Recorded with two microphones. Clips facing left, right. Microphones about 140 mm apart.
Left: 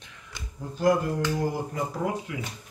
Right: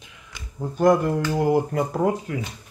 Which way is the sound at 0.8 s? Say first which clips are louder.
Right 5 dB; 60° right (ahead or behind).